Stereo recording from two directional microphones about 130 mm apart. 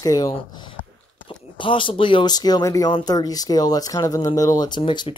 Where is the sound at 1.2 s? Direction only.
40° left (ahead or behind).